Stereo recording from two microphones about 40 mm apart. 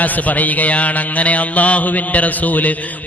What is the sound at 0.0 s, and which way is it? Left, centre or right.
A man's voice, left.